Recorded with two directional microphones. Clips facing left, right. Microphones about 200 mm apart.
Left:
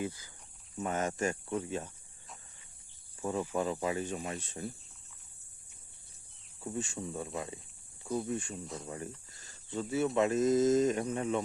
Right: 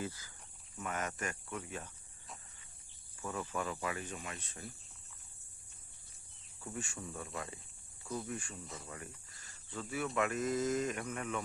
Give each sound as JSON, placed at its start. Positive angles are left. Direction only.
{"t": 0.0, "sound": "speech", "side_deg": 15}
{"t": 0.8, "sound": "speech", "side_deg": 25}
{"t": 3.2, "sound": "speech", "side_deg": 25}
{"t": 6.6, "sound": "speech", "side_deg": 25}